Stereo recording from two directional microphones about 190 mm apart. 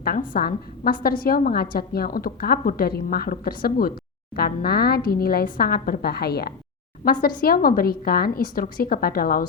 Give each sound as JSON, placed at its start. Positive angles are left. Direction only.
{"t": 0.0, "sound": "a woman's voice", "side_deg": 55}